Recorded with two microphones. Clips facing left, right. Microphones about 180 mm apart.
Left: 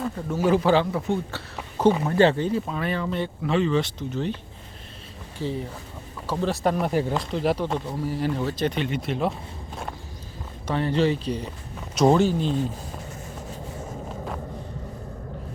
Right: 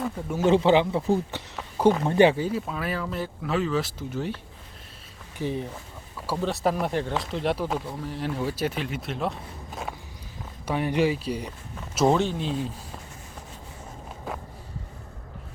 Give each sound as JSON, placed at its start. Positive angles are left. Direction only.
{"t": 0.3, "sound": "speech", "side_deg": -20}
{"t": 2.0, "sound": "speech", "side_deg": -15}
{"t": 5.4, "sound": "speech", "side_deg": -15}
{"t": 6.2, "sound": "speech", "side_deg": 0}
{"t": 8.4, "sound": "speech", "side_deg": -10}
{"t": 10.7, "sound": "speech", "side_deg": -10}